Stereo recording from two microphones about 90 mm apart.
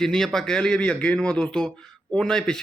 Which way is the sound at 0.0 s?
5° left (ahead or behind).